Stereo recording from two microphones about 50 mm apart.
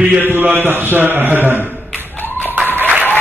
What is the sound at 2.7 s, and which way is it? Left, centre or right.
Applause, right.